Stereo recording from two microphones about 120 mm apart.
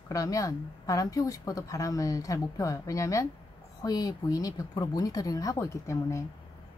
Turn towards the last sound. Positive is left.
turn(degrees=25)  # may be behind; listen again after turning